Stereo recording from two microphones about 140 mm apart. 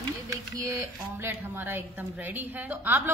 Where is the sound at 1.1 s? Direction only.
15° right (ahead or behind).